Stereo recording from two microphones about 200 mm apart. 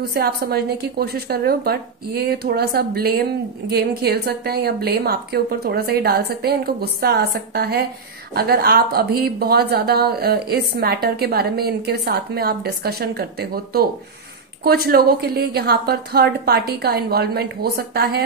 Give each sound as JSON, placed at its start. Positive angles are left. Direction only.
{"t": 0.1, "sound": "a woman's voice", "side_deg": -50}